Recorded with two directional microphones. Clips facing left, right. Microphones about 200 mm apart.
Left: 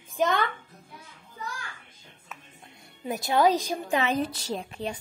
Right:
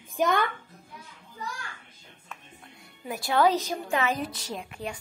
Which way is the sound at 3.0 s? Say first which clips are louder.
Left 1 dB; 20° left (ahead or behind).